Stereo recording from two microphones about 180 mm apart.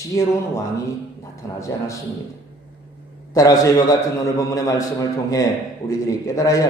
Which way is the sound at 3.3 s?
20° left (ahead or behind).